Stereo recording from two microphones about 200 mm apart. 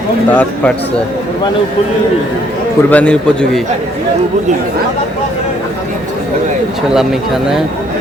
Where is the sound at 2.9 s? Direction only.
5° left (ahead or behind).